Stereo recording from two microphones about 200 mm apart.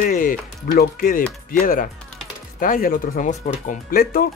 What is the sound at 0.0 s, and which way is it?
Speech, 40° left (ahead or behind).